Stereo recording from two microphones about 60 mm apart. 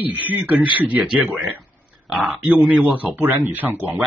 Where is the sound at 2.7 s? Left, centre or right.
Right.